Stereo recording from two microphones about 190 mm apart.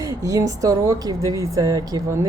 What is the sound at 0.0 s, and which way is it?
A woman's voice, 15° right (ahead or behind).